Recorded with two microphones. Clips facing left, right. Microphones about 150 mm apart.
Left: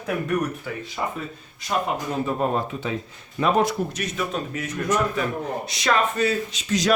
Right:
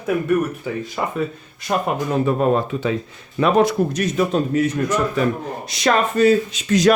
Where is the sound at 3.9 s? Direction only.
35° right (ahead or behind).